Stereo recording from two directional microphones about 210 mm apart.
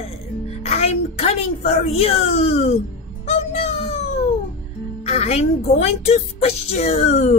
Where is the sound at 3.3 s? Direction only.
30° left (ahead or behind).